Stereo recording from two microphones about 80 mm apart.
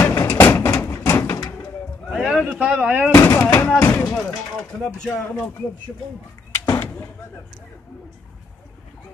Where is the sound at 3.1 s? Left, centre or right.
Left.